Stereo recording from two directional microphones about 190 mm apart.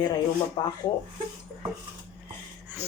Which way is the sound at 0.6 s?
25° left (ahead or behind).